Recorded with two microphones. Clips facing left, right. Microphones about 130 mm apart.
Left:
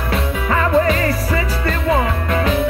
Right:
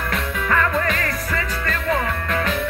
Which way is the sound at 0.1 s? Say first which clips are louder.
Left 4 dB; 20° left (ahead or behind).